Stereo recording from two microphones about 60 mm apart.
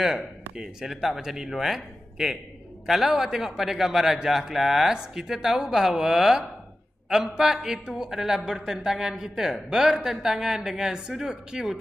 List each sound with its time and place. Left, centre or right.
0.6 s a man's voice: centre